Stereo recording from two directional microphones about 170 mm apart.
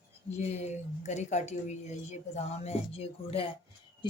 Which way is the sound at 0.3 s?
40° left (ahead or behind).